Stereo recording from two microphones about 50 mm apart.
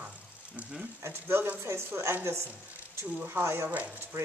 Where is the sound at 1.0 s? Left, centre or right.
Right.